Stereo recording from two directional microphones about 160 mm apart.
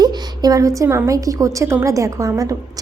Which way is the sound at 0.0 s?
25° right (ahead or behind).